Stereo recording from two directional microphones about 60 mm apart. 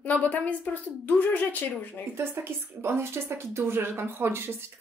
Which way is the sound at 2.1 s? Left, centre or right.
Right.